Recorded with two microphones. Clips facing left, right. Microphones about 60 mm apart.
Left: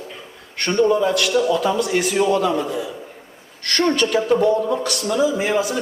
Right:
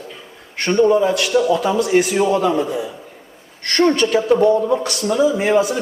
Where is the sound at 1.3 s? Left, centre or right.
Right.